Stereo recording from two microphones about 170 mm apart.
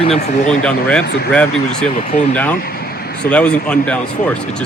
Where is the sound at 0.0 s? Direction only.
40° left (ahead or behind).